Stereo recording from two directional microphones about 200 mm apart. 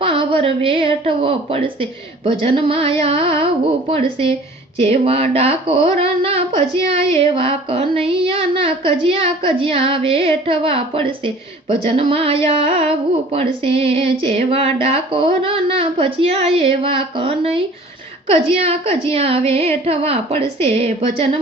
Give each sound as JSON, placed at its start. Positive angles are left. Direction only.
{"t": 0.0, "sound": "speech", "side_deg": -25}
{"t": 18.6, "sound": "speech", "side_deg": -30}